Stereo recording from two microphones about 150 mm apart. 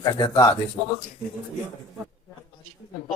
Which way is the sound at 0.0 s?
25° left (ahead or behind).